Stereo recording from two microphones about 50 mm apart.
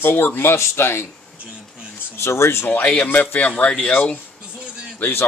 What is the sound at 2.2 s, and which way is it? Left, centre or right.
Speech, left.